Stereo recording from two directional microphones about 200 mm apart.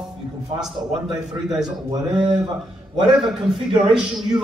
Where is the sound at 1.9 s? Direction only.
25° right (ahead or behind).